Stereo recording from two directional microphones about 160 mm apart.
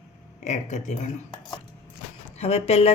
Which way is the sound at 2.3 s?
40° left (ahead or behind).